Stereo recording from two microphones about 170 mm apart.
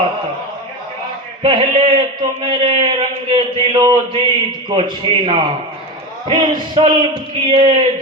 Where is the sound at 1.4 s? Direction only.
30° right (ahead or behind).